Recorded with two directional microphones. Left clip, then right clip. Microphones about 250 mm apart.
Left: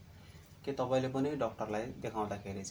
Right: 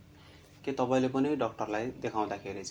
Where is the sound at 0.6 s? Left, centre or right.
Right.